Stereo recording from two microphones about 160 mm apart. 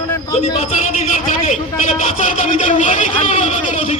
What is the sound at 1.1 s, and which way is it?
Speech, 50° left (ahead or behind).